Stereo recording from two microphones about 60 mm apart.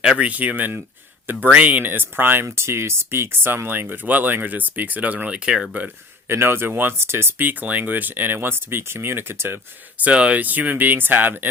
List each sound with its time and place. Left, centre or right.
0.0 s speech: centre
6.2 s speech: right
10.0 s speech: centre